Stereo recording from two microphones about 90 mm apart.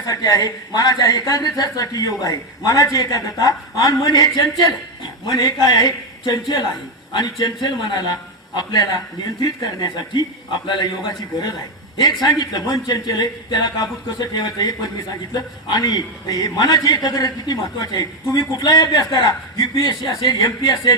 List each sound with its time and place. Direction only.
0.0 s a man's voice: 40° left (ahead or behind)
11.9 s a man's voice: 50° left (ahead or behind)